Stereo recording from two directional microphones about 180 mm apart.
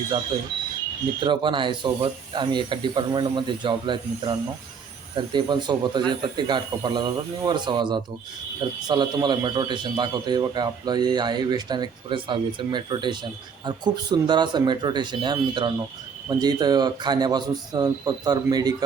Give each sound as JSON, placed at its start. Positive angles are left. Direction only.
{"t": 1.2, "sound": "a man's voice", "side_deg": -25}